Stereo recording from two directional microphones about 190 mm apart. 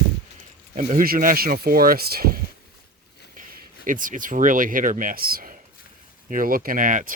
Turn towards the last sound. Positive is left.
turn(degrees=-45)  # may be behind; listen again after turning